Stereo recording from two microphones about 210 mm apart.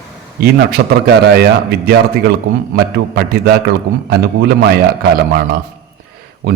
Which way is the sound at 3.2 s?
45° right (ahead or behind).